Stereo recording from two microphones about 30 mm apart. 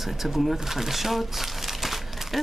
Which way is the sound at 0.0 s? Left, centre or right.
Centre.